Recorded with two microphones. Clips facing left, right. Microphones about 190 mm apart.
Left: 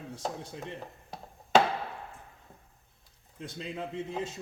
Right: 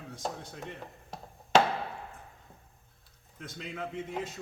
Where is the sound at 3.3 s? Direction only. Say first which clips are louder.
Left 2 dB; 30° left (ahead or behind).